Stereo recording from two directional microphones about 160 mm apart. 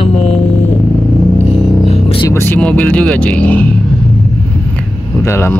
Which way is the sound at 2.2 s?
15° left (ahead or behind).